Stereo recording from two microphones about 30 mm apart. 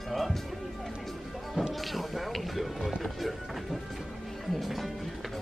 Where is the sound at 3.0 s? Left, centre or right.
Centre.